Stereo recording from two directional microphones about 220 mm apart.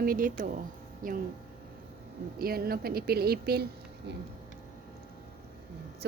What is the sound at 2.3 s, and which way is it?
Speech, 45° right (ahead or behind).